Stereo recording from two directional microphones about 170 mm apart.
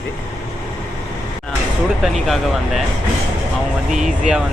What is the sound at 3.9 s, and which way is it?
Speech, centre (ahead or behind).